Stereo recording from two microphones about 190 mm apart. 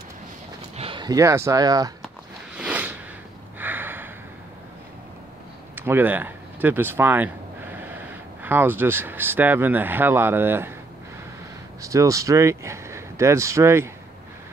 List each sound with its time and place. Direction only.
0.7 s speech: 25° right (ahead or behind)
2.5 s a sound: 5° right (ahead or behind)
5.8 s speech: 10° right (ahead or behind)
11.8 s speech: 15° right (ahead or behind)